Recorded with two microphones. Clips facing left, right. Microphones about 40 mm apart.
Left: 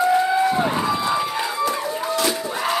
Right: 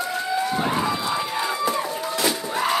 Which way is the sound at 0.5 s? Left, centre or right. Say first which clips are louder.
Left 2 dB; centre.